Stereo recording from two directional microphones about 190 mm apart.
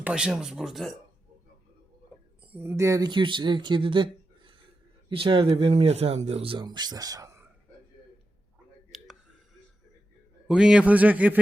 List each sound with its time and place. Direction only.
0.0 s speech: 5° right (ahead or behind)
2.5 s speech: 10° right (ahead or behind)
8.9 s a sound: centre (ahead or behind)
10.5 s a man's voice: 5° right (ahead or behind)